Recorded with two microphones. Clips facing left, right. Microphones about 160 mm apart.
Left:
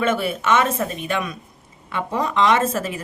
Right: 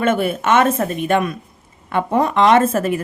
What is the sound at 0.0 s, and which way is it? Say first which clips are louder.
A woman's voice: right 4 dB; 50° right (ahead or behind).